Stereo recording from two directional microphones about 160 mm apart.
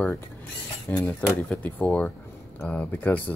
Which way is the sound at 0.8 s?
5° left (ahead or behind).